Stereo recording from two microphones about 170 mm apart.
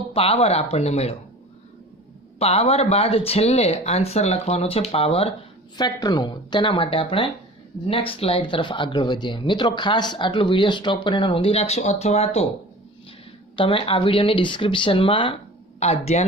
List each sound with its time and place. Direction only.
0.1 s speech: 35° left (ahead or behind)
2.4 s speech: 35° left (ahead or behind)
5.7 s speech: 25° left (ahead or behind)
13.6 s speech: 30° left (ahead or behind)